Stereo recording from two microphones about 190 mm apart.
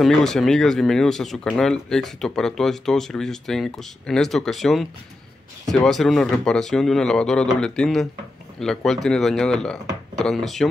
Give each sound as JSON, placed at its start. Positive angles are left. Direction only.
{"t": 0.0, "sound": "speech", "side_deg": 0}